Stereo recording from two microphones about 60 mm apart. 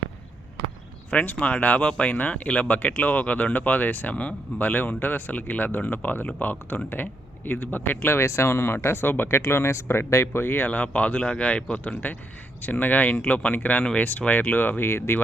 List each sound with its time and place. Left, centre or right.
1.1 s speech: left
10.7 s speech: left